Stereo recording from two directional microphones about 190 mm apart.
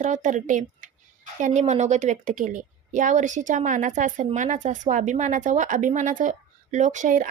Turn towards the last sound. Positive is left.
turn(degrees=-40)  # may be behind; listen again after turning